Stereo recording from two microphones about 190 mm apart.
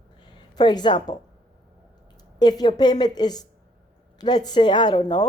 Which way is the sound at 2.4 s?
20° left (ahead or behind).